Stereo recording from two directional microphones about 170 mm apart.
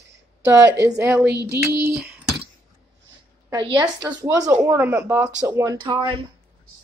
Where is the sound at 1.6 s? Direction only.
15° right (ahead or behind).